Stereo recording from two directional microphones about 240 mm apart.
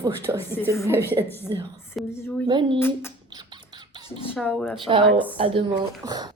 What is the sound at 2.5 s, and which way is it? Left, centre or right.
Speech, centre.